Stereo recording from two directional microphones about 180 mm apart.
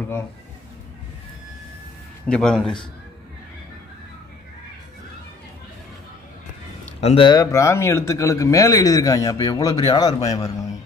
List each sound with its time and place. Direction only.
2.2 s a man's voice: 5° left (ahead or behind)
7.0 s speech: 30° left (ahead or behind)